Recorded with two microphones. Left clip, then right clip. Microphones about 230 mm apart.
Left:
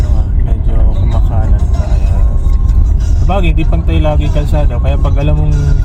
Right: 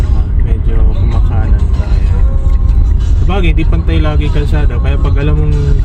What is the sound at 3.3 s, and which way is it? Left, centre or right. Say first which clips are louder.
Speech: left 1 dB; left.